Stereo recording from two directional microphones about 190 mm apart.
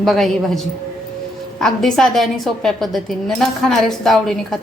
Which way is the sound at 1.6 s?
Centre (ahead or behind).